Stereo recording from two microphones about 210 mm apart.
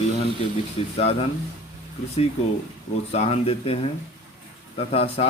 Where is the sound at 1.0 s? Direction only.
30° left (ahead or behind).